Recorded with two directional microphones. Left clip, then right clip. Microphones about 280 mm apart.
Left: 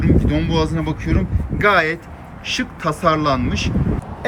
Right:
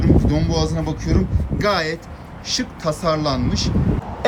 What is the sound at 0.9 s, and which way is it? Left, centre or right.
Speech, centre.